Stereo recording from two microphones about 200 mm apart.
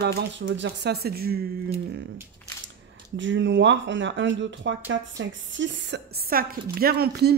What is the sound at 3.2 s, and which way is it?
A woman's voice, 65° right (ahead or behind).